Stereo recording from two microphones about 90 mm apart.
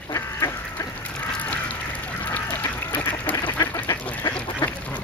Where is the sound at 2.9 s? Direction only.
20° left (ahead or behind).